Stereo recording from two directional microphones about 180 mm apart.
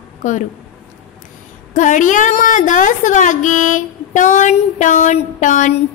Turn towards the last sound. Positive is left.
turn(degrees=45)  # may be behind; listen again after turning